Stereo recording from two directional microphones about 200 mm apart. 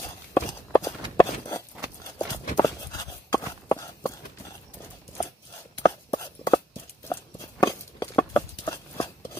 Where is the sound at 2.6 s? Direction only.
20° left (ahead or behind).